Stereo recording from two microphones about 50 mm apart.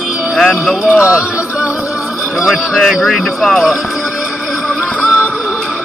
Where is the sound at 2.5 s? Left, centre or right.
Centre.